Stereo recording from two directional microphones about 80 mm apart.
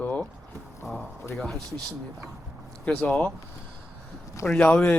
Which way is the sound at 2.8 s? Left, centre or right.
Centre.